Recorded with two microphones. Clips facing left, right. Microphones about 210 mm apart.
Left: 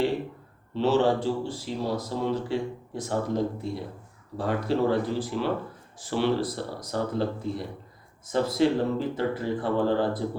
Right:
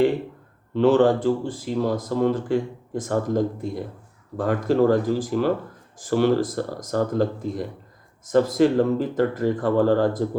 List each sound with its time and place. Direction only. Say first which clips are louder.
0.7 s speech: right 6 dB; 55° right (ahead or behind)